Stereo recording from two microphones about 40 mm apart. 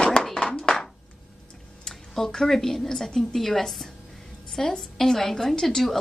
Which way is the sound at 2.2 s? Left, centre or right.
Centre.